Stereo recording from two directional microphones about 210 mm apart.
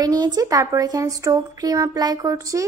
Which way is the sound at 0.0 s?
20° right (ahead or behind).